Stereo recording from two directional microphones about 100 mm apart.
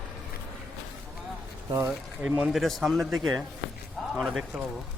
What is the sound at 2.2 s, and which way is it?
Speech, 10° right (ahead or behind).